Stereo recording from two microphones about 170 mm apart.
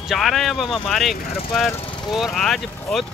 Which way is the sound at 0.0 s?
Centre (ahead or behind).